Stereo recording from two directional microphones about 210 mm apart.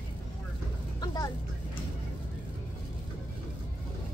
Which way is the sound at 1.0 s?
20° left (ahead or behind).